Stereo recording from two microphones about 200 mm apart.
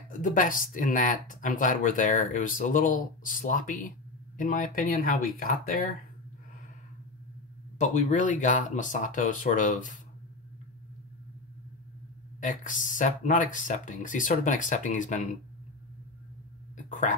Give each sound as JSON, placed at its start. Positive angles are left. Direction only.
{"t": 0.2, "sound": "speech", "side_deg": 40}
{"t": 7.8, "sound": "speech", "side_deg": 35}
{"t": 12.4, "sound": "speech", "side_deg": 40}